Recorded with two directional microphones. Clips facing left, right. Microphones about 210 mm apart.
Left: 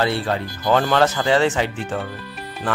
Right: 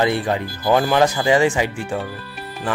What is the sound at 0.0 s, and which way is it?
Speech, 15° right (ahead or behind).